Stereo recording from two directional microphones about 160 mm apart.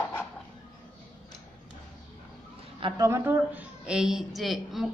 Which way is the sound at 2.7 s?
30° right (ahead or behind).